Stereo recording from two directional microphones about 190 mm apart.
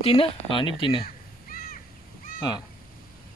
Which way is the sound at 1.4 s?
50° left (ahead or behind).